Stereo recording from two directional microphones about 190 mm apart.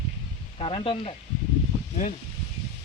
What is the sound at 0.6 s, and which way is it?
Speech, 30° left (ahead or behind).